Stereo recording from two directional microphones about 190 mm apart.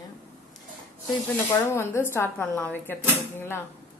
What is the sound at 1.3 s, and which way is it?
Speech, 10° left (ahead or behind).